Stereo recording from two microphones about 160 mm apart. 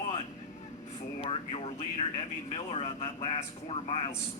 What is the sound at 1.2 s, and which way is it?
Speech, 35° left (ahead or behind).